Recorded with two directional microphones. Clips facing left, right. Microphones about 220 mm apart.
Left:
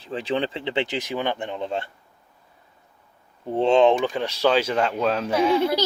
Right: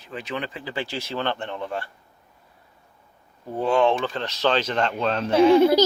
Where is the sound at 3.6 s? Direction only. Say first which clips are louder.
Left 3 dB; 20° left (ahead or behind).